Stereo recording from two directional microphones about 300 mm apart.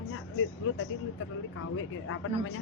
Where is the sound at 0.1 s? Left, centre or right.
Left.